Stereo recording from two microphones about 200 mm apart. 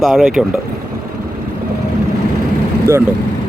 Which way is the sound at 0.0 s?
Centre (ahead or behind).